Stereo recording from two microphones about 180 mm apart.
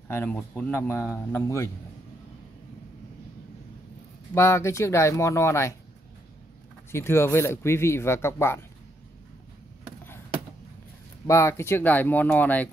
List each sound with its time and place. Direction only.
0.1 s speech: 10° left (ahead or behind)
4.3 s speech: 15° left (ahead or behind)
6.9 s speech: 15° left (ahead or behind)
11.2 s speech: 15° left (ahead or behind)